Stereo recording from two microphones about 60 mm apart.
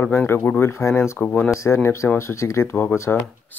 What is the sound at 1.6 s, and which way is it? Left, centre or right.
Speech, left.